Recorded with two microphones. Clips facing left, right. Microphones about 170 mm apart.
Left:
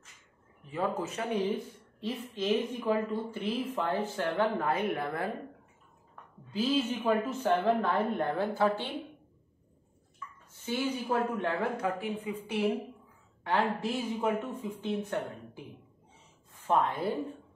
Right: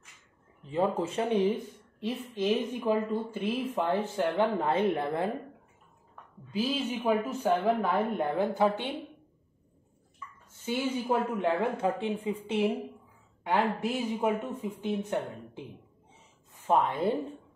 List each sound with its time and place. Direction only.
0.7 s a woman's voice: 25° right (ahead or behind)
6.5 s speech: 10° right (ahead or behind)
10.6 s a woman's voice: 20° right (ahead or behind)
16.6 s speech: 15° right (ahead or behind)